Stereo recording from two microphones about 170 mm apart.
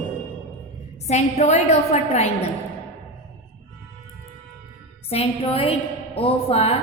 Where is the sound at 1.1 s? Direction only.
40° left (ahead or behind).